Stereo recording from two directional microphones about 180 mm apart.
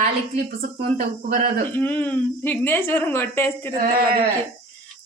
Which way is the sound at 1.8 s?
10° left (ahead or behind).